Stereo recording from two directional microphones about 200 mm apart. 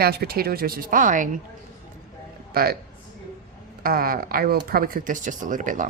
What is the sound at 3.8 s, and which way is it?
Speech, 45° right (ahead or behind).